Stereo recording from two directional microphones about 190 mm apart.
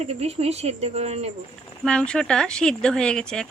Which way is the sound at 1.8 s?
5° left (ahead or behind).